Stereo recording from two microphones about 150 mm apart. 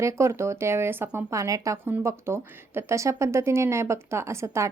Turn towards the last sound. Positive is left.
turn(degrees=-20)  # may be behind; listen again after turning